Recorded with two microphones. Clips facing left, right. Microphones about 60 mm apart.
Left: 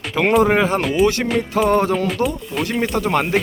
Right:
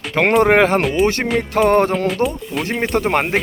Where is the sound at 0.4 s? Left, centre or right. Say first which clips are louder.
Right 3 dB; right.